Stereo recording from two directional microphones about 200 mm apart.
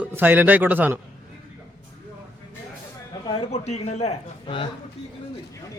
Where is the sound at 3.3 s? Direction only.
30° left (ahead or behind).